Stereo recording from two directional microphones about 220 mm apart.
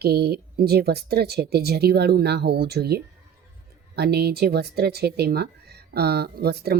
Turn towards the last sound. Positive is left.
turn(degrees=-45)  # may be behind; listen again after turning